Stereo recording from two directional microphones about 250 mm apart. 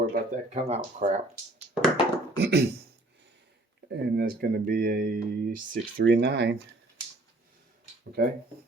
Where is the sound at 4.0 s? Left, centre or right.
Right.